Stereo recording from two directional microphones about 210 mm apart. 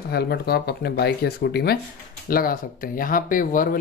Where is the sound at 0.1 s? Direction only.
50° left (ahead or behind).